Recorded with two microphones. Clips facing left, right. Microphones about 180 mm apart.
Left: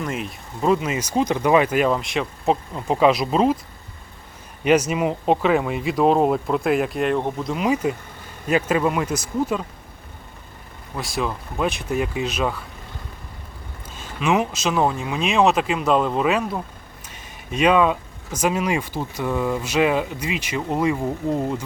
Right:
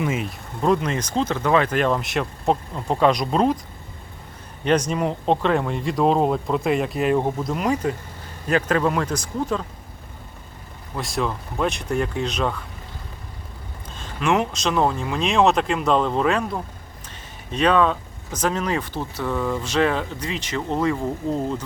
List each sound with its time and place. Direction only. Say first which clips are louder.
0.0 s speech: right 3 dB; centre (ahead or behind)
4.6 s speech: left 2 dB; 5° left (ahead or behind)
10.9 s speech: even; centre (ahead or behind)
13.9 s speech: even; 5° left (ahead or behind)